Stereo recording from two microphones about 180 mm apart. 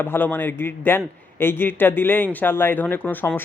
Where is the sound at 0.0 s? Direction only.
10° left (ahead or behind).